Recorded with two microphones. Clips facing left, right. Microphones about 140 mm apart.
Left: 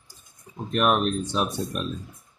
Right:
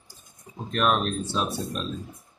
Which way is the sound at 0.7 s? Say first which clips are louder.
Left 2 dB; 10° left (ahead or behind).